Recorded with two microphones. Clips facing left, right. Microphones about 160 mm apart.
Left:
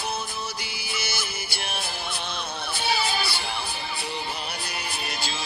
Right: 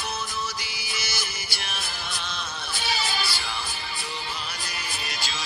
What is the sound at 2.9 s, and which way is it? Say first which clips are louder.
Music: left 3 dB; 60° left (ahead or behind).